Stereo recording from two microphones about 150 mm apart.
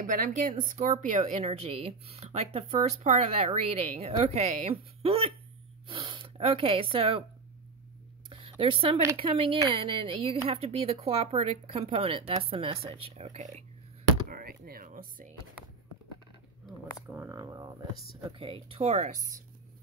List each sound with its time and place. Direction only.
0.0 s a woman's voice: 60° right (ahead or behind); by 7.2 s 35° right (ahead or behind)
8.3 s a sound: 35° right (ahead or behind)
9.1 s a woman's voice: 35° right (ahead or behind)
14.3 s a sound: 75° right (ahead or behind)
17.1 s camera: 20° right (ahead or behind)
18.2 s a woman's voice: 35° right (ahead or behind); by 19.4 s 55° right (ahead or behind)